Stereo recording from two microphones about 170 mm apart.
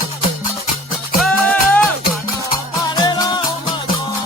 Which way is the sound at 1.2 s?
5° left (ahead or behind).